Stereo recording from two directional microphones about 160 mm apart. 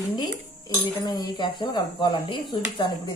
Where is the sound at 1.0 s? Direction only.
25° left (ahead or behind).